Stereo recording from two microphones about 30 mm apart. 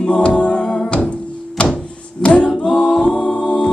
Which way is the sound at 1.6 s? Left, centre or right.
Left.